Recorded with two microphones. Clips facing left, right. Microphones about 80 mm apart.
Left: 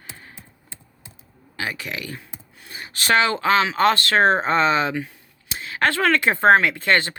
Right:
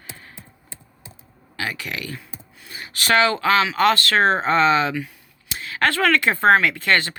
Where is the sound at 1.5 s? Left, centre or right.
Left.